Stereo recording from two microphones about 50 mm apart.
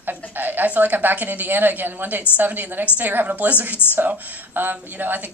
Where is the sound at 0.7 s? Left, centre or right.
Right.